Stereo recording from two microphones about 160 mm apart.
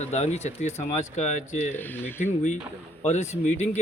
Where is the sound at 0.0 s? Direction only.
45° left (ahead or behind).